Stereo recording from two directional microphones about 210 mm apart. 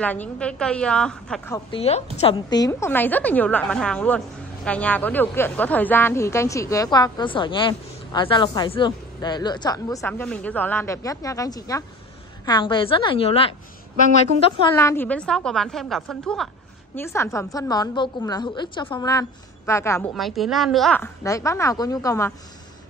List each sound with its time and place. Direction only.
0.0 s a woman's voice: 5° left (ahead or behind)
1.5 s a woman's voice: 25° left (ahead or behind)
14.7 s a woman's voice: 15° left (ahead or behind)
16.9 s speech: 10° left (ahead or behind)
20.2 s speech: centre (ahead or behind); by 22.3 s 15° left (ahead or behind)